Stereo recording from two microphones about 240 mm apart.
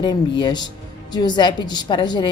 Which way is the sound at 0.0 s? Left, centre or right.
Centre.